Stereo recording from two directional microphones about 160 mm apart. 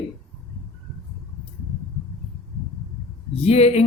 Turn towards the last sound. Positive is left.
turn(degrees=40)  # may be behind; listen again after turning